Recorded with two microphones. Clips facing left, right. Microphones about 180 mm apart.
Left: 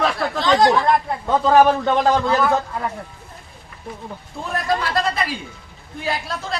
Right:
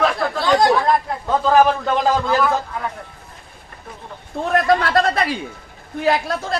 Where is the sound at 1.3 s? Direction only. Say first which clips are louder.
Left 1 dB; centre (ahead or behind).